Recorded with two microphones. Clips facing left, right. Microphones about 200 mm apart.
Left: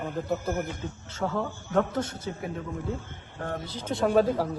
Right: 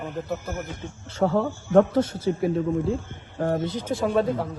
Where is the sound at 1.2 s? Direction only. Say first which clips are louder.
Right 7 dB; 60° right (ahead or behind).